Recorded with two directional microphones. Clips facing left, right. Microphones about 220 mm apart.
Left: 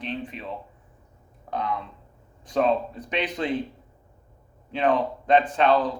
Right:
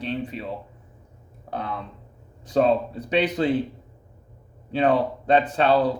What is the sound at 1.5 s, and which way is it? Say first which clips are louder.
Speech: left 2 dB; 35° right (ahead or behind).